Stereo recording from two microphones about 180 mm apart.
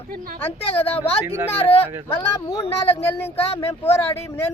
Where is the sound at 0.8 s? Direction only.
35° left (ahead or behind).